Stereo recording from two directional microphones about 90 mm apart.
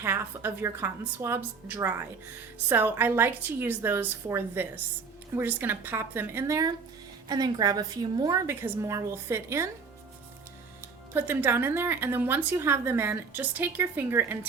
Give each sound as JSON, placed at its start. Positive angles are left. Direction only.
{"t": 0.0, "sound": "speech", "side_deg": -30}
{"t": 7.3, "sound": "a woman's voice", "side_deg": -50}
{"t": 8.4, "sound": "speech", "side_deg": -30}
{"t": 10.8, "sound": "speech", "side_deg": -25}